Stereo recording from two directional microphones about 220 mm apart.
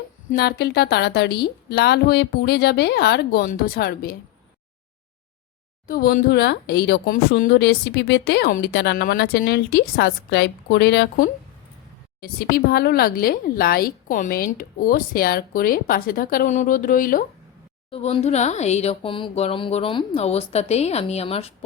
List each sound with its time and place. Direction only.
0.3 s speech: 45° left (ahead or behind)
5.9 s speech: 40° left (ahead or behind)
17.9 s speech: 30° left (ahead or behind)